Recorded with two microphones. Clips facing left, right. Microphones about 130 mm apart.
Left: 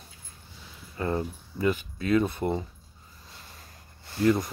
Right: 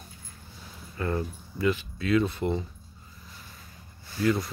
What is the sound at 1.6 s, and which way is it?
Speech, 40° left (ahead or behind).